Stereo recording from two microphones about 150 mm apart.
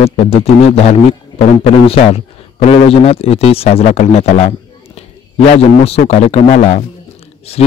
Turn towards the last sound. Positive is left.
turn(degrees=45)  # may be behind; listen again after turning